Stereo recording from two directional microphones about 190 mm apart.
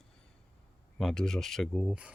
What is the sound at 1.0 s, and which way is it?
Speech, centre (ahead or behind).